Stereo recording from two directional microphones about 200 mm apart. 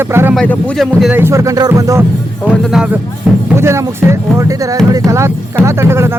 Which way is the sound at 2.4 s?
Centre (ahead or behind).